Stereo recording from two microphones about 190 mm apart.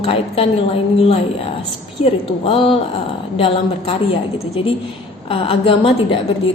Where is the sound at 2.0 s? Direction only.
30° left (ahead or behind).